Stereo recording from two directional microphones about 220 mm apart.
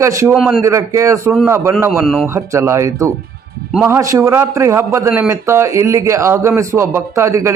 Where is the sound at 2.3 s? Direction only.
15° right (ahead or behind).